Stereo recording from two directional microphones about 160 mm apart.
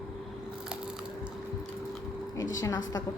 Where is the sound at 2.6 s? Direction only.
25° left (ahead or behind).